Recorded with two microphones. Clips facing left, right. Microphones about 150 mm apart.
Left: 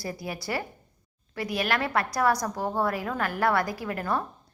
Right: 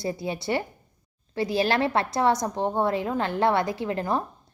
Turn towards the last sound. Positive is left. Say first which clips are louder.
# right 3 dB
turn(degrees=-25)  # may be behind; listen again after turning